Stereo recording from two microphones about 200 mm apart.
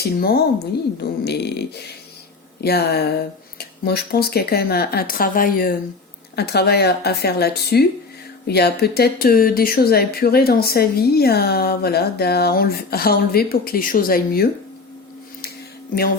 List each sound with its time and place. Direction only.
0.0 s speech: 50° left (ahead or behind)